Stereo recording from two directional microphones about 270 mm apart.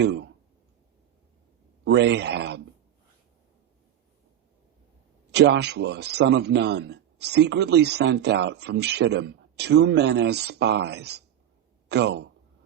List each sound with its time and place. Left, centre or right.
0.0 s a man's voice: right
1.8 s speech: right
5.3 s a man's voice: right